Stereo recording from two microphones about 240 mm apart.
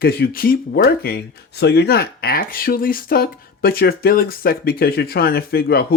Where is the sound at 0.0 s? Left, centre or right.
Left.